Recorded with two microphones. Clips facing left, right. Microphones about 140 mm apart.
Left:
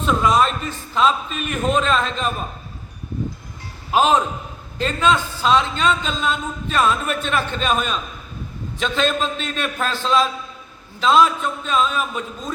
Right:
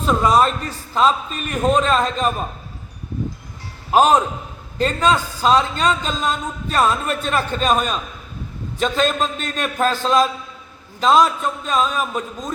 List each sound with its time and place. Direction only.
0.0 s a man's voice: 35° right (ahead or behind)
3.9 s a man's voice: 45° right (ahead or behind)